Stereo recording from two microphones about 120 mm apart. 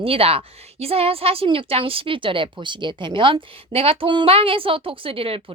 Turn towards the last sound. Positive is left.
turn(degrees=-50)  # may be behind; listen again after turning